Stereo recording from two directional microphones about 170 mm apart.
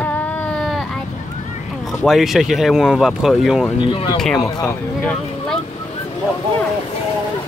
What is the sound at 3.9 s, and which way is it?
Speech, 25° left (ahead or behind).